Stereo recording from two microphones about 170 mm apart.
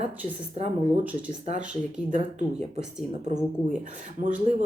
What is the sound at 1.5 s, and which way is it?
Speech, 45° right (ahead or behind).